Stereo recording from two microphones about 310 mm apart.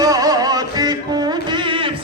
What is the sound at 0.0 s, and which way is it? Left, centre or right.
Music, centre.